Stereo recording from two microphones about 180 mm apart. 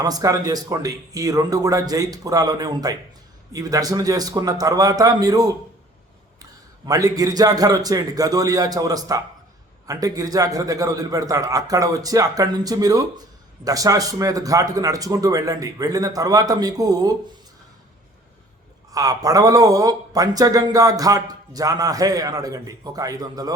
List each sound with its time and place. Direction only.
0.0 s a man's voice: 20° right (ahead or behind)
18.9 s a man's voice: 20° right (ahead or behind)